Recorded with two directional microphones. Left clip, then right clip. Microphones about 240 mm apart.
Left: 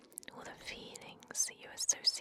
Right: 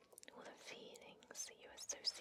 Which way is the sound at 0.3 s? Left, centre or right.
Left.